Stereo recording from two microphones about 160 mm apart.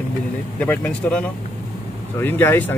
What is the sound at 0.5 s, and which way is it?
Speech, 10° left (ahead or behind).